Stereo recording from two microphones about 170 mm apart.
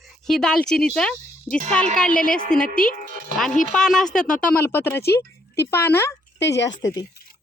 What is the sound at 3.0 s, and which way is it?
Speech, 55° right (ahead or behind).